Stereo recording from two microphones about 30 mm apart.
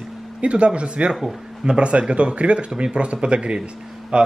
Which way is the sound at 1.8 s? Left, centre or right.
Right.